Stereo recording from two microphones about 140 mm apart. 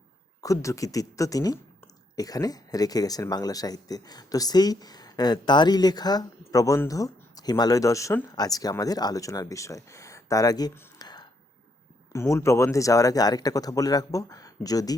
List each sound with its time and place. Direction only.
0.4 s speech: 20° left (ahead or behind)